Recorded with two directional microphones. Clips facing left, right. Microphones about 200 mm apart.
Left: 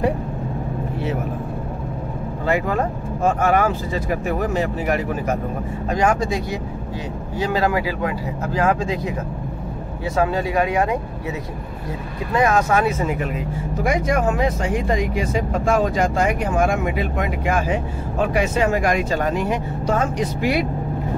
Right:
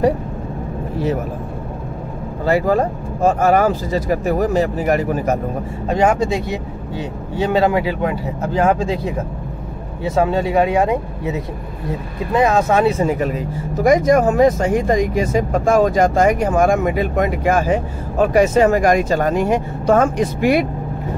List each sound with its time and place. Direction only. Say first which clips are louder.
2.4 s speech: right 5 dB; 35° right (ahead or behind)
5.9 s speech: right 4 dB; 25° right (ahead or behind)
12.4 s speech: right 3 dB; 25° right (ahead or behind); by 20.6 s 50° right (ahead or behind)